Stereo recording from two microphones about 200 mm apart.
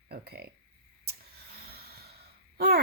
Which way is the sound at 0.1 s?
50° right (ahead or behind).